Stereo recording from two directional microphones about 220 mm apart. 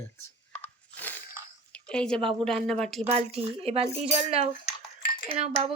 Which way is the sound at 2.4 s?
Centre (ahead or behind).